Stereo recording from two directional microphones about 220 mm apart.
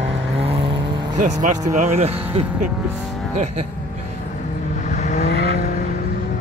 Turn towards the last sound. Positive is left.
turn(degrees=35)  # may be behind; listen again after turning